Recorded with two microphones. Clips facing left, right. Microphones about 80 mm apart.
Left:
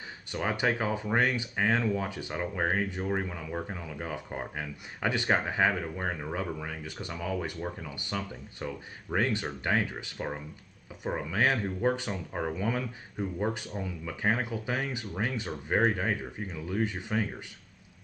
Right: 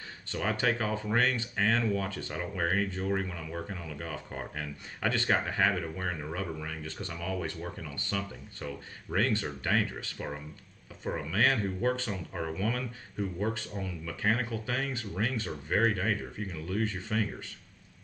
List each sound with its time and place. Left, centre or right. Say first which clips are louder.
0.3 s speech: left 1 dB; centre